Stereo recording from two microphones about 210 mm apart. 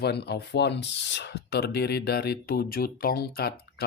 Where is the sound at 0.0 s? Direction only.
50° left (ahead or behind).